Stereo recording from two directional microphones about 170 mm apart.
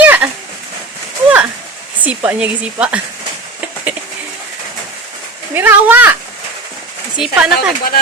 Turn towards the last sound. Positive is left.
turn(degrees=-5)  # may be behind; listen again after turning